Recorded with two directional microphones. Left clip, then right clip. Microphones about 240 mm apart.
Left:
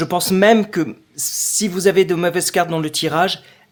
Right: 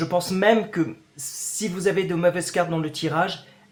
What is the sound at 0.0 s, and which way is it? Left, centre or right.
Speech, left.